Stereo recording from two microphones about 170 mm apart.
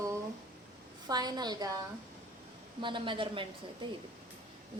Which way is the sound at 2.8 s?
30° right (ahead or behind).